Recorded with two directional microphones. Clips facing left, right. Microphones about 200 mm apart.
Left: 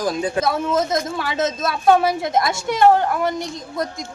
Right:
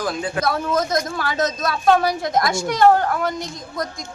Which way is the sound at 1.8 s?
20° left (ahead or behind).